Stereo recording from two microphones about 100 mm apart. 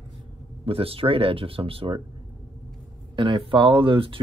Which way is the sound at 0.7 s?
70° right (ahead or behind).